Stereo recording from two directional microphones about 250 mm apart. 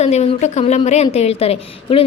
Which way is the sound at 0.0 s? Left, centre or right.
Left.